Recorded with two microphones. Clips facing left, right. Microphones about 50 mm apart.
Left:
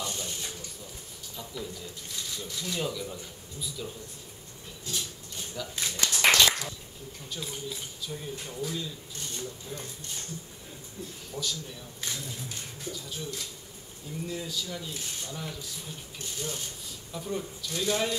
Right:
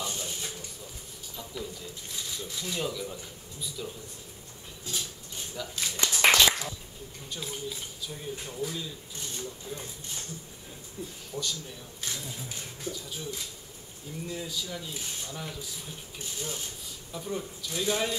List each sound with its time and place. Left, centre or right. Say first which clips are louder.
0.0 s a sound: even; centre
1.3 s speech: even; centre
4.8 s dog: even; centre
6.0 s a sound: right 1 dB; centre
7.2 s speech: right 1 dB; centre
11.0 s speech: right 2 dB; right
12.1 s speech: even; centre